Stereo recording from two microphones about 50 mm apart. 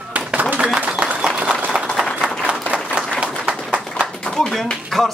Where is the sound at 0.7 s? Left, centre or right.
Right.